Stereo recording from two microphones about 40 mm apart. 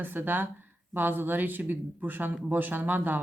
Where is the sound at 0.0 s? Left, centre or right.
Right.